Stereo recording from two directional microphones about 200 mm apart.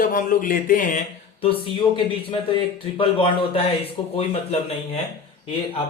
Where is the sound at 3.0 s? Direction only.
30° left (ahead or behind).